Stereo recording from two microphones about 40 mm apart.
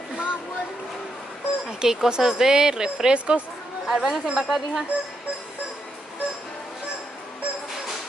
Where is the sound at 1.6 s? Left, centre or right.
Centre.